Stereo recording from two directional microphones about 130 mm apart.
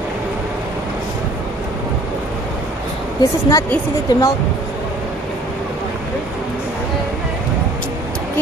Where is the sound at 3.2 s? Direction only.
25° left (ahead or behind).